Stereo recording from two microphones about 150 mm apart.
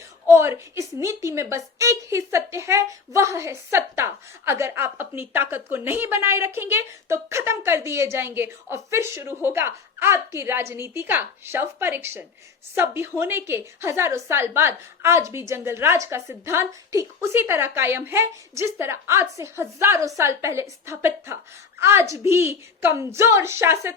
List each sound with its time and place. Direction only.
0.3 s a woman's voice: 15° right (ahead or behind)